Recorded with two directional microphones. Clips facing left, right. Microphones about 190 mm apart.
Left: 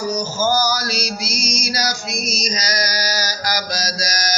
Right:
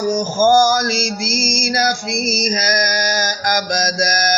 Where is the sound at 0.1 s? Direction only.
50° right (ahead or behind).